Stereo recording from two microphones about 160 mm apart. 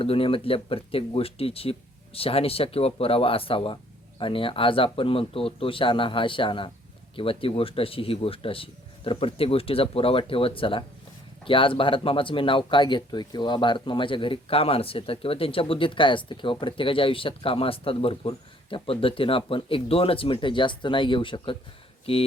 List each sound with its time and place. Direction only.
0.0 s speech: 35° left (ahead or behind)